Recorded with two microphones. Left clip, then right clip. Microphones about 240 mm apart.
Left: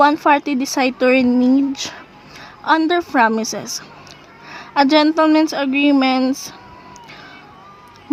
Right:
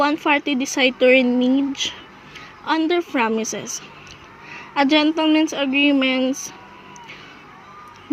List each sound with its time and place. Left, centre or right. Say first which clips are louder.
0.0 s speech: left 5 dB; centre
1.4 s speech: left 3 dB; left
2.6 s speech: left 4 dB; centre
4.7 s speech: left 4 dB; centre